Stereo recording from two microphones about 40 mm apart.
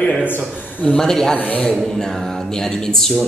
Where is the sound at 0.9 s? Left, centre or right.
Centre.